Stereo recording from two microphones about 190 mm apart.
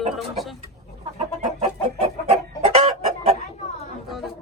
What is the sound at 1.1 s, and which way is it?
Chicken, 35° right (ahead or behind).